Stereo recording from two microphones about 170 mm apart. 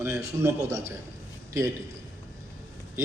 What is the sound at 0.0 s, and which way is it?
Speech, 15° right (ahead or behind).